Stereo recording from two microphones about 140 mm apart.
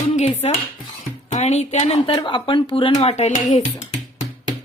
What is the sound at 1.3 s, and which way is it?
Speech, 55° left (ahead or behind).